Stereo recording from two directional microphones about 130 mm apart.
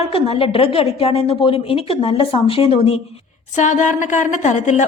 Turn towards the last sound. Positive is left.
turn(degrees=70)  # may be behind; listen again after turning